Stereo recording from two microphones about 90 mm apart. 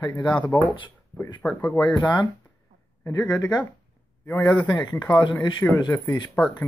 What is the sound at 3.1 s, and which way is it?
Speech, 45° left (ahead or behind).